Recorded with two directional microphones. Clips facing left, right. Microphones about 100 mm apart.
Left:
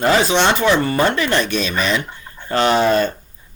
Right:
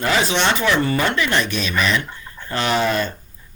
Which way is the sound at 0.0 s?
30° left (ahead or behind).